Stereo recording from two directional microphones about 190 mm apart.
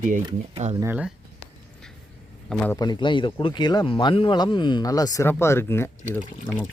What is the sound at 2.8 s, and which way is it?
Speech, 20° left (ahead or behind).